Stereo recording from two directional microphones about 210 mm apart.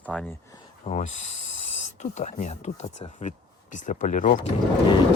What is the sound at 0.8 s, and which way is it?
Speech, 25° left (ahead or behind).